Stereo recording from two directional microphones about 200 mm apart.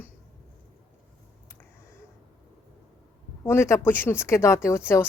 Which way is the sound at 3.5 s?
15° left (ahead or behind).